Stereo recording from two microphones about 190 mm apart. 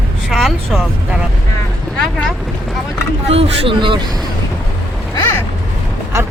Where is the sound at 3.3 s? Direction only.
25° right (ahead or behind).